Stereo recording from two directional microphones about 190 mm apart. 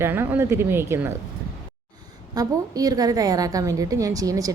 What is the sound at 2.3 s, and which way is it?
A woman's voice, 20° right (ahead or behind).